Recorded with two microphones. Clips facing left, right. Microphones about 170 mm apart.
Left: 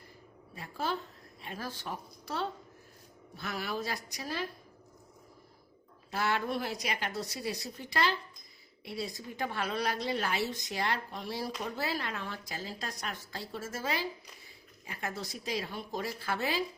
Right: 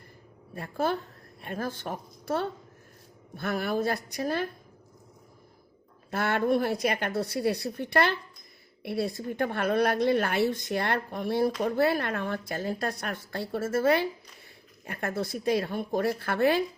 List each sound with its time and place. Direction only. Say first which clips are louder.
0.5 s a woman's voice: right 7 dB; 55° right (ahead or behind)
6.1 s a woman's voice: right 7 dB; 55° right (ahead or behind)